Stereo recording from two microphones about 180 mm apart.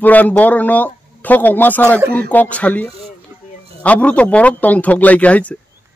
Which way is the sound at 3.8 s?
5° left (ahead or behind).